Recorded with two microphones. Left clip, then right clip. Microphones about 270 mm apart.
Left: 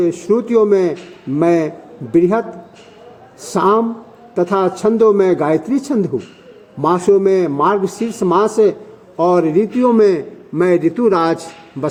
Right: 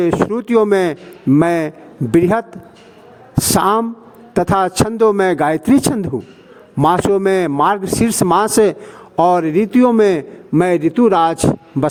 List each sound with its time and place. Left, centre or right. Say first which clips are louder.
0.0 s a man's voice: even; right